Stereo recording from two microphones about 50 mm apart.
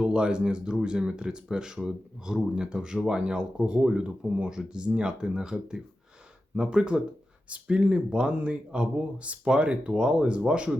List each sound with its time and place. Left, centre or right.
0.0 s speech: right
6.6 s speech: right